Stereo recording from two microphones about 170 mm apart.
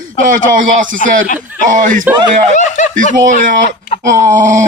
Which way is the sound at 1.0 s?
45° left (ahead or behind).